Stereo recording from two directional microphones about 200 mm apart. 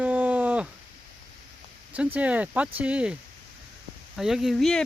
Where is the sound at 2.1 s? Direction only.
5° right (ahead or behind).